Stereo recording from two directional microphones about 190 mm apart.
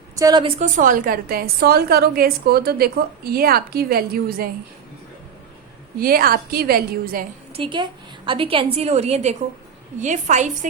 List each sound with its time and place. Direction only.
0.2 s a woman's voice: 20° right (ahead or behind)
0.8 s a woman's voice: 45° right (ahead or behind)
6.0 s a woman's voice: 50° right (ahead or behind)
7.5 s a woman's voice: 25° right (ahead or behind)